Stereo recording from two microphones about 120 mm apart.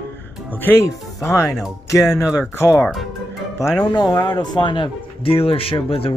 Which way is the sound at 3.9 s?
30° left (ahead or behind).